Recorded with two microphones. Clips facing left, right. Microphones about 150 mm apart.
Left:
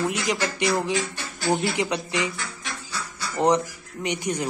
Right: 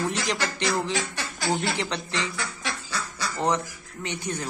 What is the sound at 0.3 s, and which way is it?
A man's voice, 10° left (ahead or behind).